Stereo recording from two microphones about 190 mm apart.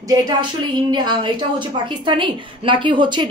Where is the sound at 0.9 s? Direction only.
25° right (ahead or behind).